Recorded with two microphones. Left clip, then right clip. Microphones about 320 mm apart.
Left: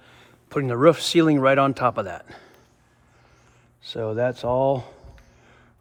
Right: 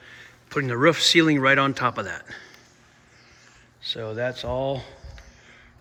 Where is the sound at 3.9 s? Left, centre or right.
Centre.